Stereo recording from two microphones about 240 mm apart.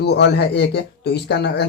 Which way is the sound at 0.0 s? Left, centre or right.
Left.